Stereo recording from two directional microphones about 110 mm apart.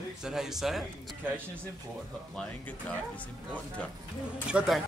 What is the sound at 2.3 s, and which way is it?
Speech, 10° left (ahead or behind).